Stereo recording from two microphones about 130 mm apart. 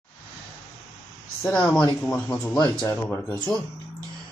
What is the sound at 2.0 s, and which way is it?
Speech, 15° left (ahead or behind).